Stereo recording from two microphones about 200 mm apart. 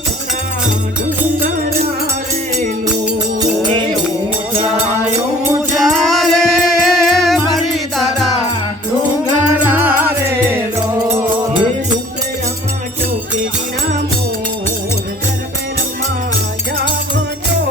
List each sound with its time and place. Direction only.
5.7 s music: centre (ahead or behind)